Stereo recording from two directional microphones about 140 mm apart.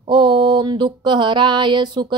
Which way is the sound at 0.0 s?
35° right (ahead or behind).